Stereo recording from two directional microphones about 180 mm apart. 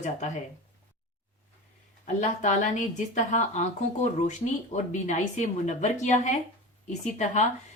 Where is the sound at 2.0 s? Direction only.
45° left (ahead or behind).